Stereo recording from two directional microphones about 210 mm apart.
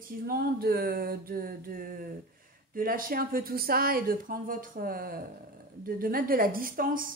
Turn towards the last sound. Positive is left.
turn(degrees=-40)  # may be behind; listen again after turning